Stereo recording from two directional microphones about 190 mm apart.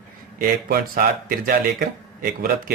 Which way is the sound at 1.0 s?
50° right (ahead or behind).